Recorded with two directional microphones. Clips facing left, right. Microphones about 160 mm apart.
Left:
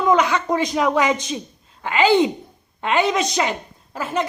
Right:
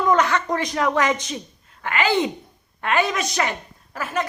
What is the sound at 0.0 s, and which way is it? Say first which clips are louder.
A woman's voice: left 2 dB; 15° left (ahead or behind).